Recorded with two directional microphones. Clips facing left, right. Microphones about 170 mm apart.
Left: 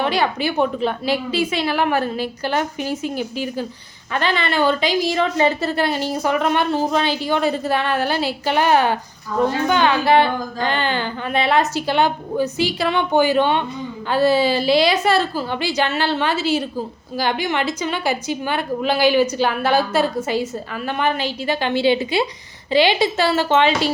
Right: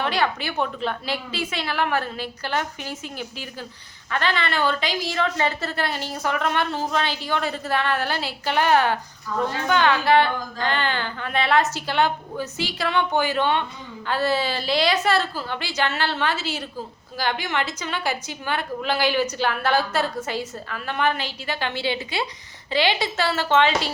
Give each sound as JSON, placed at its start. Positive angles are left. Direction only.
{"t": 0.0, "sound": "a woman's voice", "side_deg": 15}